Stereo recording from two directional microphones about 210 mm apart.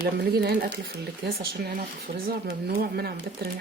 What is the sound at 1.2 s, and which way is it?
Speech, 45° right (ahead or behind).